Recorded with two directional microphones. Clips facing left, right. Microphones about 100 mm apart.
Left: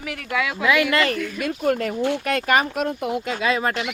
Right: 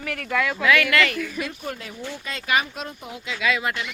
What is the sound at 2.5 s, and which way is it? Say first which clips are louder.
Speech: left 3 dB; 50° left (ahead or behind).